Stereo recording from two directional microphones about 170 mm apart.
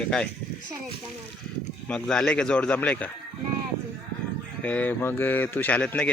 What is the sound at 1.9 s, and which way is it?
Speech, 5° left (ahead or behind).